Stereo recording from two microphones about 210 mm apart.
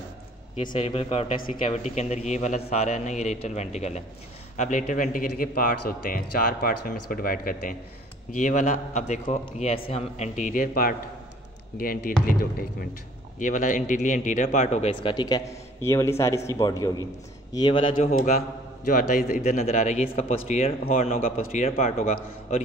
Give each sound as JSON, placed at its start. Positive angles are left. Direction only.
{"t": 0.7, "sound": "a man's voice", "side_deg": 25}
{"t": 12.3, "sound": "a man's voice", "side_deg": 45}
{"t": 15.0, "sound": "a man's voice", "side_deg": 20}
{"t": 17.9, "sound": "a man's voice", "side_deg": 40}